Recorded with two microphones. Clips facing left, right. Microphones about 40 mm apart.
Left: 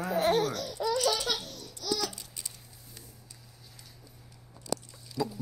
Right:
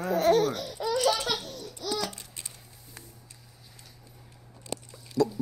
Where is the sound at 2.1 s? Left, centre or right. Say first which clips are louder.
Right 1 dB; right.